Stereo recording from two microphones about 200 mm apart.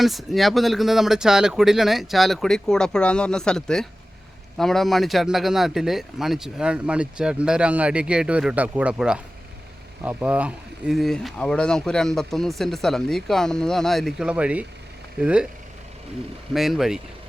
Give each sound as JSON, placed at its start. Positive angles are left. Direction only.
{"t": 0.0, "sound": "speech", "side_deg": 0}
{"t": 16.6, "sound": "speech", "side_deg": 0}